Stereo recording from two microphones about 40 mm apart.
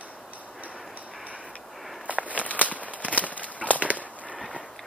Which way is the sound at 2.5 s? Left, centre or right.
Left.